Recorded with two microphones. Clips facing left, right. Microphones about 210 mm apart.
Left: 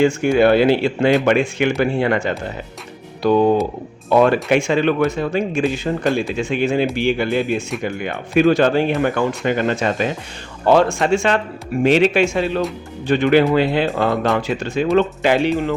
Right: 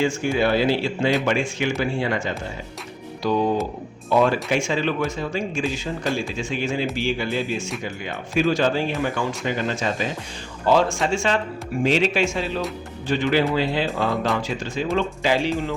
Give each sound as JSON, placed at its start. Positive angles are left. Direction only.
{"t": 0.0, "sound": "speech", "side_deg": 60}